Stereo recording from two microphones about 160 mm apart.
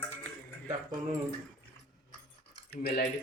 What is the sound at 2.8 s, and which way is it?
Speech, 80° left.